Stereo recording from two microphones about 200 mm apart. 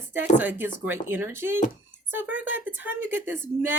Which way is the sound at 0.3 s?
10° right (ahead or behind).